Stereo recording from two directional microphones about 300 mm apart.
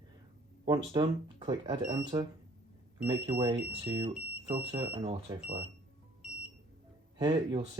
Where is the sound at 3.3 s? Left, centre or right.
Centre.